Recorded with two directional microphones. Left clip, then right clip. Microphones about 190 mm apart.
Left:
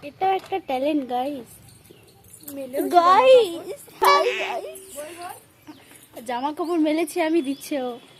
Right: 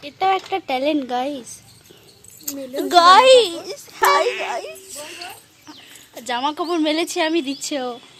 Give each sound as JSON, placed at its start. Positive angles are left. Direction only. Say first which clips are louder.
{"t": 0.0, "sound": "speech", "louder": "right 4 dB", "side_deg": -5}
{"t": 2.9, "sound": "a woman's voice", "louder": "right 4 dB", "side_deg": 0}